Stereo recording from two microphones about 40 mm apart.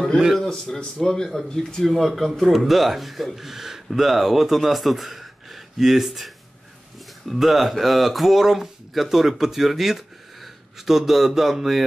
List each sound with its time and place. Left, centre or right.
0.4 s speech: centre
7.3 s speech: centre